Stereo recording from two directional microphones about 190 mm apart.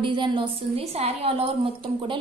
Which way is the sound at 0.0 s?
25° right (ahead or behind).